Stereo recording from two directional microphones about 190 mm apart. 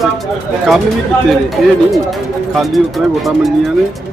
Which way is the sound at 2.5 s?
Centre (ahead or behind).